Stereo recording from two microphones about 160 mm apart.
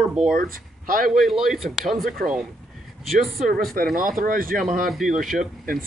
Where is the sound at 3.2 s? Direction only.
Centre (ahead or behind).